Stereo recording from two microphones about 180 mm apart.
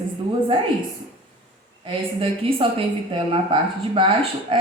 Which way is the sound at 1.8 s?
30° right (ahead or behind).